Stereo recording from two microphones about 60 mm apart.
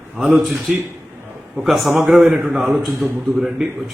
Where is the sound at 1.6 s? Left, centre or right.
Centre.